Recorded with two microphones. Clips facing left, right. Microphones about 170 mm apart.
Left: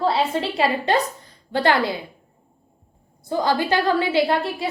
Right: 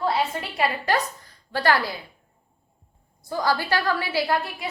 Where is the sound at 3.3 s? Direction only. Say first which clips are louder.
Left 4 dB; 20° left (ahead or behind).